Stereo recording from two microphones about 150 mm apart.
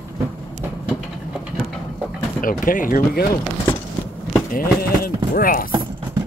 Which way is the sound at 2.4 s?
65° left (ahead or behind).